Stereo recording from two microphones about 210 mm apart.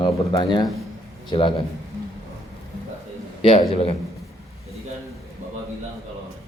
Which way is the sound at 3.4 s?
25° left (ahead or behind).